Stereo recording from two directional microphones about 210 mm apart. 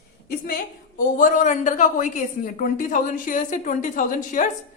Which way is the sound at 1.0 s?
40° left (ahead or behind).